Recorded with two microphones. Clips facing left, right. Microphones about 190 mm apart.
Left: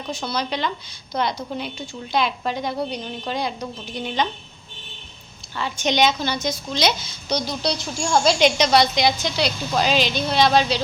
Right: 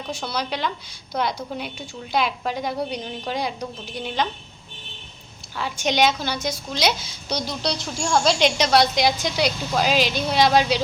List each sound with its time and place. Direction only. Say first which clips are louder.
0.1 s a woman's voice: left 2 dB; 10° right (ahead or behind)
5.5 s a woman's voice: left 1 dB; 5° right (ahead or behind)